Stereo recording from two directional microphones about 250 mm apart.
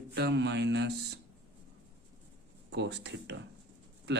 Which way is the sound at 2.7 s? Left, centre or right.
Right.